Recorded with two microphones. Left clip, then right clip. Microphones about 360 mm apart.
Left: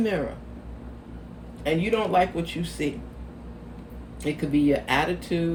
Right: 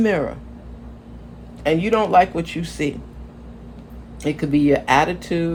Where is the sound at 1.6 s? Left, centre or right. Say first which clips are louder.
Right 6 dB; centre.